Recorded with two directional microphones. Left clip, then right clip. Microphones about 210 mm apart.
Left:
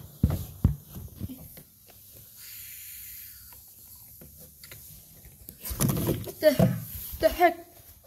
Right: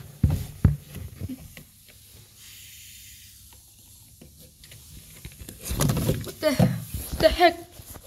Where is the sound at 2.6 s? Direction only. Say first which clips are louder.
Right 2 dB; 55° left (ahead or behind).